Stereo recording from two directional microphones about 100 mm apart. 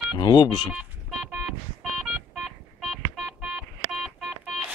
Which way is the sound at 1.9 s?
5° right (ahead or behind).